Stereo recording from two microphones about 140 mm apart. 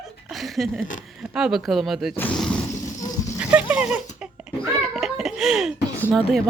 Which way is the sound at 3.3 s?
10° right (ahead or behind).